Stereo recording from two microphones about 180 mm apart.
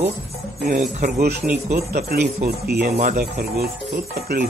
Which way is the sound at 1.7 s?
60° right (ahead or behind).